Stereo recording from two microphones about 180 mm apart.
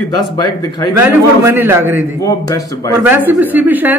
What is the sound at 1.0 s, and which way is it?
Speech, 10° right (ahead or behind).